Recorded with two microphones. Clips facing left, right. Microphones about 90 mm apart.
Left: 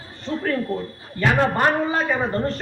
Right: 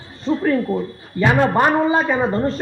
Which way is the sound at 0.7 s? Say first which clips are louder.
Right 5 dB; 15° right (ahead or behind).